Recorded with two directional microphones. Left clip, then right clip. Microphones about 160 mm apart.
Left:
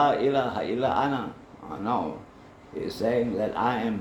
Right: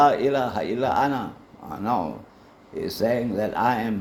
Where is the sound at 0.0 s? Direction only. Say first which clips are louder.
Right 4 dB; 90° right.